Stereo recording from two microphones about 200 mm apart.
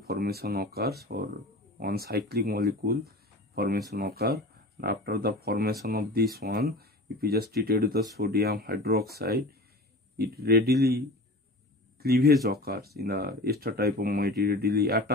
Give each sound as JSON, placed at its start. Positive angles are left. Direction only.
{"t": 0.0, "sound": "speech", "side_deg": -50}